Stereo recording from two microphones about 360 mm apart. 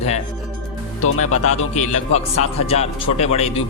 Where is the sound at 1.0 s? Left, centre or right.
Left.